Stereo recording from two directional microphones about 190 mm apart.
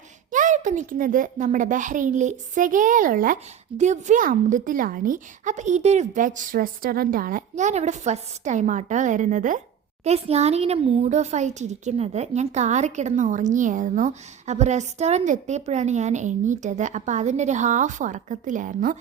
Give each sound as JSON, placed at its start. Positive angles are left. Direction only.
{"t": 0.3, "sound": "a child's voice", "side_deg": -45}